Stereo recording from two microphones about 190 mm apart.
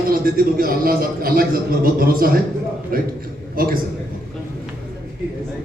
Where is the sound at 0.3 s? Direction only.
50° right (ahead or behind).